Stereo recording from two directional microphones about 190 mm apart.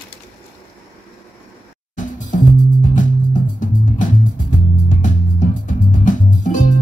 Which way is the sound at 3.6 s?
45° left (ahead or behind).